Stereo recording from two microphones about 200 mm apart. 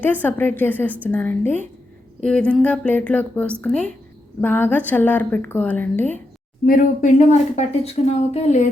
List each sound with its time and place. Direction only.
0.0 s a woman's voice: 10° left (ahead or behind)
6.7 s speech: 40° left (ahead or behind)